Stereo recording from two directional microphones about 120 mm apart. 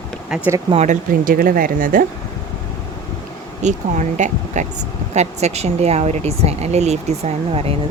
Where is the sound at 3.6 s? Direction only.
85° right.